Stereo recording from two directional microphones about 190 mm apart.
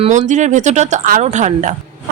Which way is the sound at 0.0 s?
40° right (ahead or behind).